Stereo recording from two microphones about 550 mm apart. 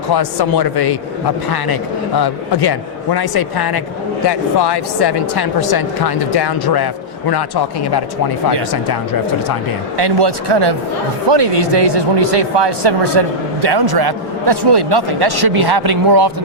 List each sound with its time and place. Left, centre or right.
0.1 s a man's voice: left
10.0 s speech: right